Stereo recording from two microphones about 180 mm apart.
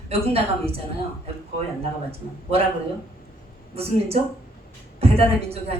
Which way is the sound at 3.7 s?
35° right (ahead or behind).